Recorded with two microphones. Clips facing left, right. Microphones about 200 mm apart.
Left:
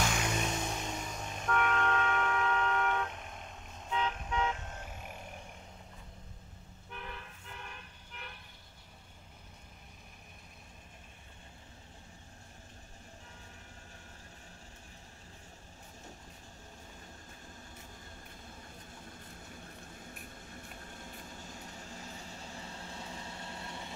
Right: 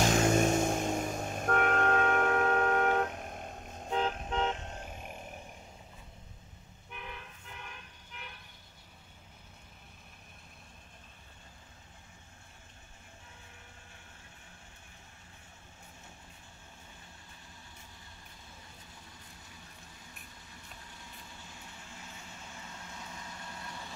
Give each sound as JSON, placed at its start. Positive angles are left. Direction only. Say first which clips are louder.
{"t": 0.0, "sound": "music", "louder": "right 8 dB", "side_deg": -45}
{"t": 4.7, "sound": "vehicle", "louder": "right 2 dB", "side_deg": -15}
{"t": 6.9, "sound": "toot", "louder": "even", "side_deg": -5}
{"t": 19.0, "sound": "a sound", "louder": "left 5 dB", "side_deg": 50}